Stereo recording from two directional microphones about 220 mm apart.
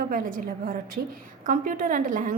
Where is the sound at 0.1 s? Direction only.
40° right (ahead or behind).